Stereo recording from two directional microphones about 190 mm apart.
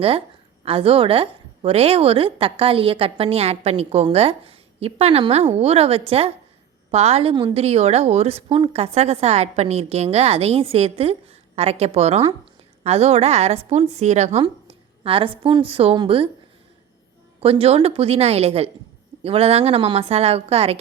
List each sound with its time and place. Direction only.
0.6 s a woman's voice: 30° right (ahead or behind)
17.4 s a woman's voice: 30° right (ahead or behind)